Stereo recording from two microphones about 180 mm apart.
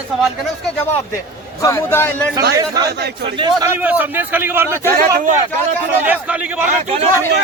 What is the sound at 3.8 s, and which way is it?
A man's voice, 10° right (ahead or behind).